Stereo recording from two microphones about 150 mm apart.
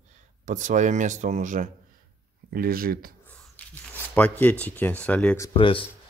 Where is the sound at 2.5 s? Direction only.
75° right (ahead or behind).